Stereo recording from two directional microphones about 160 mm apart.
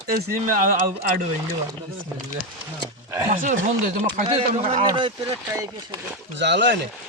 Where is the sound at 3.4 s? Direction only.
55° right (ahead or behind).